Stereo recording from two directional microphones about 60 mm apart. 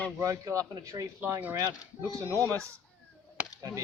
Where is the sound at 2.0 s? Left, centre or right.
Right.